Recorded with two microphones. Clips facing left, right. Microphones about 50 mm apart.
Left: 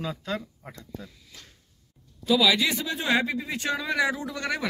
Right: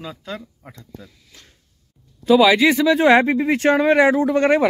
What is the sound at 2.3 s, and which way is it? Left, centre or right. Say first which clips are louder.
Speech: right 9 dB; right.